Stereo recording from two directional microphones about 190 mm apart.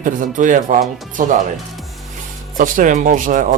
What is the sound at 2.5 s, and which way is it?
A man's voice, 45° right (ahead or behind).